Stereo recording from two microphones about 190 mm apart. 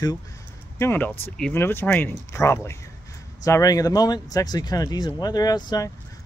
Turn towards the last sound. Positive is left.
turn(degrees=20)  # may be behind; listen again after turning